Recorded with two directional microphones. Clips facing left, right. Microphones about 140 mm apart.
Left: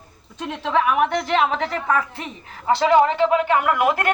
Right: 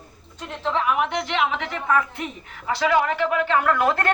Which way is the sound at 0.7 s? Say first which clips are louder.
Left 4 dB; 65° left (ahead or behind).